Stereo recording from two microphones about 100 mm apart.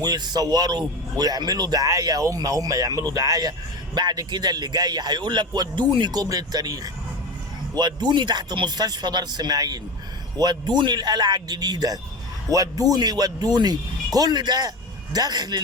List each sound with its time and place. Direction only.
0.0 s speech: 40° right (ahead or behind)
7.8 s speech: 45° right (ahead or behind)